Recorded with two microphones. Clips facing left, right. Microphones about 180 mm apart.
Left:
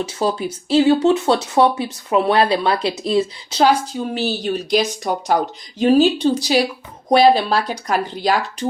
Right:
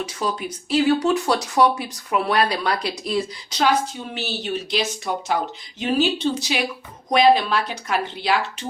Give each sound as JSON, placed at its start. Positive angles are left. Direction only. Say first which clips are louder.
{"t": 0.0, "sound": "a woman's voice", "louder": "left 5 dB", "side_deg": 30}